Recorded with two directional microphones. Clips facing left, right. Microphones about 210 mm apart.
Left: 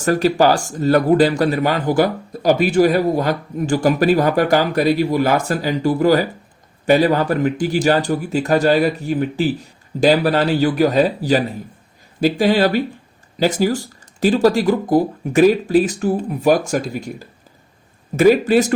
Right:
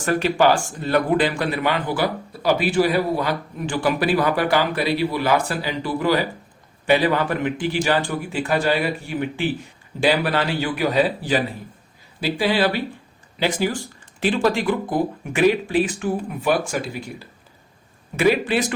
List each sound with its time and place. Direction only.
0.0 s speech: 40° left (ahead or behind)